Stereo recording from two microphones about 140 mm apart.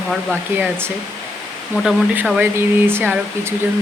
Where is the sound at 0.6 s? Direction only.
15° right (ahead or behind).